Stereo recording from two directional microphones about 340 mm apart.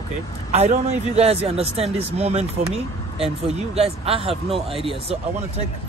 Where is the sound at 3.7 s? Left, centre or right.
Centre.